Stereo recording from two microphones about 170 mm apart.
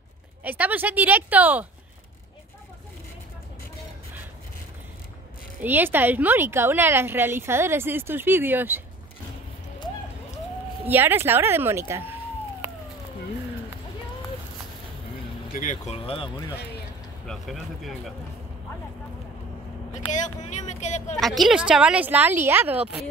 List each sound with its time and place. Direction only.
0.4 s speech: 10° right (ahead or behind)
5.6 s speech: 10° right (ahead or behind)
10.9 s speech: 10° right (ahead or behind)
15.5 s speech: 50° left (ahead or behind); by 16.3 s 35° left (ahead or behind)
17.3 s speech: centre (ahead or behind)
20.1 s speech: 45° left (ahead or behind)
21.2 s speech: centre (ahead or behind)